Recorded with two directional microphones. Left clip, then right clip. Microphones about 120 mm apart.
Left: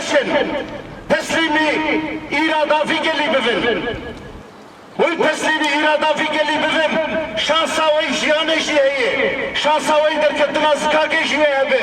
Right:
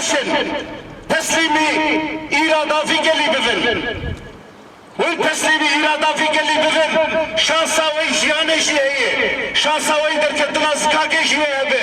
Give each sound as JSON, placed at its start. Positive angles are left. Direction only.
{"t": 0.1, "sound": "a man's voice", "side_deg": -30}
{"t": 4.9, "sound": "a man's voice", "side_deg": -25}